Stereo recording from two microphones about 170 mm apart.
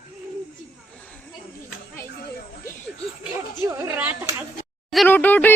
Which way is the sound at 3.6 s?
15° right (ahead or behind).